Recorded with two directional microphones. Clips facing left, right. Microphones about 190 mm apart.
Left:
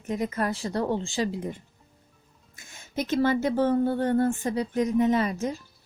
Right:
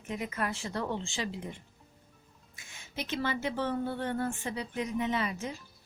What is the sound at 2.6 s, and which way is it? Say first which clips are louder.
Speech: left 9 dB; 45° left (ahead or behind).